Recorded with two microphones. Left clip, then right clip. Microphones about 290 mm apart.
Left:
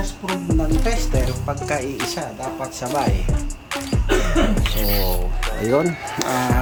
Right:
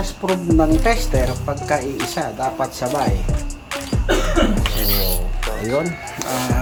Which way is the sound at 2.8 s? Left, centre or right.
Centre.